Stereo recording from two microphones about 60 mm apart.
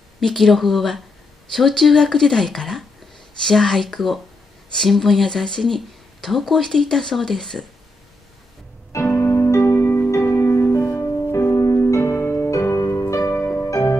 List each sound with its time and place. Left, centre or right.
0.2 s speech: centre
8.9 s music: left
11.8 s music: left